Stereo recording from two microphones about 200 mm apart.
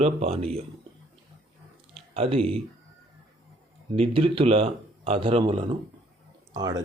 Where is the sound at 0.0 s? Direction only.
30° right (ahead or behind).